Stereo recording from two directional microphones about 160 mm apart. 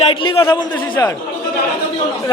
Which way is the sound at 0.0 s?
35° left (ahead or behind).